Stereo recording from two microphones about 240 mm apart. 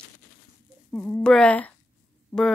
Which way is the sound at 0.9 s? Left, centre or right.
Centre.